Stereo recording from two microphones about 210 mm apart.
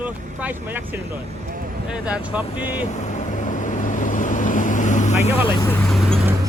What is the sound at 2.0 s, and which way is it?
Speech, 5° right (ahead or behind).